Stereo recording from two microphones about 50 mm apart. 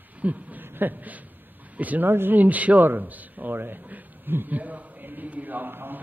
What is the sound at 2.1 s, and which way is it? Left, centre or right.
A man's voice, right.